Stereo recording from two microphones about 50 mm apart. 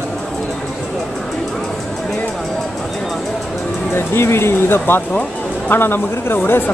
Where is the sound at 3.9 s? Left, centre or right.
Left.